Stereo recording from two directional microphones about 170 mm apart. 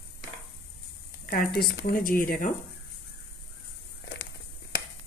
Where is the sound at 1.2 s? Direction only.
65° left (ahead or behind).